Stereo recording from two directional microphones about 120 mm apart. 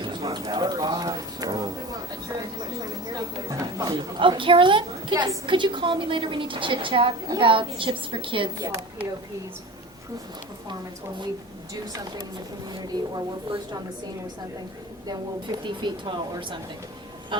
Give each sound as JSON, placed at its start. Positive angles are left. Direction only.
{"t": 0.0, "sound": "a sound", "side_deg": -40}
{"t": 3.8, "sound": "a woman's voice", "side_deg": -40}
{"t": 12.7, "sound": "a woman's voice", "side_deg": -40}
{"t": 15.6, "sound": "a woman's voice", "side_deg": -40}